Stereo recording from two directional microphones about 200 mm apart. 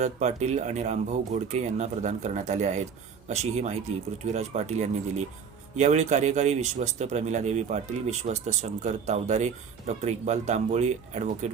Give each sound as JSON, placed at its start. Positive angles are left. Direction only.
{"t": 0.0, "sound": "speech", "side_deg": -35}